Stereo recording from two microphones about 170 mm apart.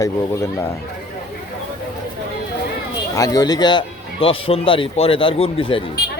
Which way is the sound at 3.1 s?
20° left (ahead or behind).